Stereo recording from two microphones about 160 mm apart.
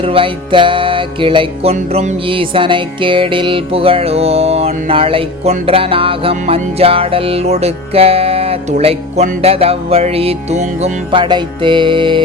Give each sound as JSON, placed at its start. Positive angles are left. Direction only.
{"t": 0.0, "sound": "music", "side_deg": -35}
{"t": 1.7, "sound": "music", "side_deg": -45}
{"t": 11.1, "sound": "music", "side_deg": -30}